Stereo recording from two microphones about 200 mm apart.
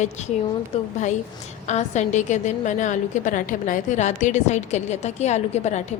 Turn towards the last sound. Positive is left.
turn(degrees=35)  # may be behind; listen again after turning